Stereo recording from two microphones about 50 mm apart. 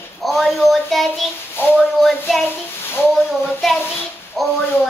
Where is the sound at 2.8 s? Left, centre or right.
Left.